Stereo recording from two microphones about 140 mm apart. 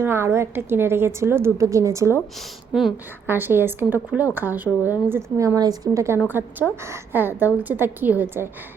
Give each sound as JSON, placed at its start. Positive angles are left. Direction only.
{"t": 0.0, "sound": "a woman's voice", "side_deg": -15}
{"t": 2.7, "sound": "a woman's voice", "side_deg": -5}
{"t": 3.2, "sound": "a woman's voice", "side_deg": -15}